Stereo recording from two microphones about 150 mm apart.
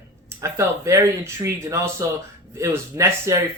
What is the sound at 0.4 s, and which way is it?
Speech, 20° right (ahead or behind).